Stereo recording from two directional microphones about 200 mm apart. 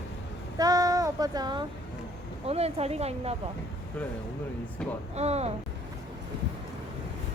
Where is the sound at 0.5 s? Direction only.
20° right (ahead or behind).